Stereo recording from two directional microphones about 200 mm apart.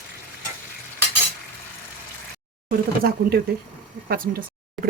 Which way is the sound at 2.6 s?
50° right (ahead or behind).